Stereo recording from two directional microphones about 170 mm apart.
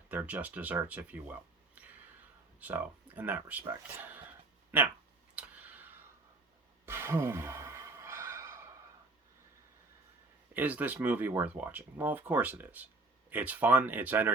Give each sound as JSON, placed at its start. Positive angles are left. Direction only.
{"t": 0.1, "sound": "speech", "side_deg": -10}
{"t": 5.3, "sound": "tick", "side_deg": -10}
{"t": 6.8, "sound": "sigh", "side_deg": -15}
{"t": 10.5, "sound": "speech", "side_deg": -10}